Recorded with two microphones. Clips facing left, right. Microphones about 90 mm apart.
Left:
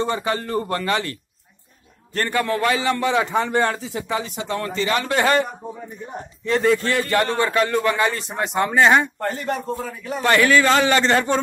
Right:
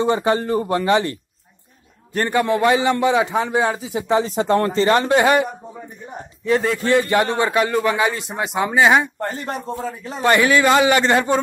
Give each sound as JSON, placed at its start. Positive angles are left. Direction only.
{"t": 0.0, "sound": "a man's voice", "side_deg": -25}
{"t": 2.1, "sound": "a man's voice", "side_deg": -20}
{"t": 3.9, "sound": "a man's voice", "side_deg": -25}
{"t": 4.4, "sound": "speech", "side_deg": -40}
{"t": 5.0, "sound": "a man's voice", "side_deg": -20}
{"t": 6.4, "sound": "a man's voice", "side_deg": -5}
{"t": 6.8, "sound": "a man's voice", "side_deg": -20}
{"t": 9.2, "sound": "a man's voice", "side_deg": -25}